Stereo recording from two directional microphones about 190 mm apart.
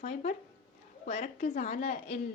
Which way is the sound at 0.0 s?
40° left (ahead or behind).